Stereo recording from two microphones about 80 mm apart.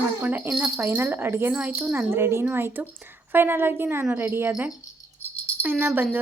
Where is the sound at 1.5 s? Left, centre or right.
Centre.